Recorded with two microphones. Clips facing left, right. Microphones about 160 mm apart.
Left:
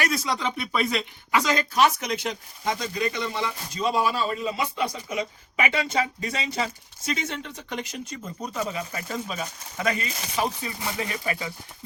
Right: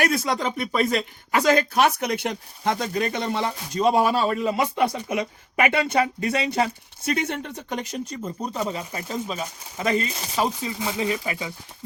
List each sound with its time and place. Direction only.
0.0 s speech: 55° right (ahead or behind); by 10.1 s 25° right (ahead or behind)
10.6 s speech: 15° right (ahead or behind)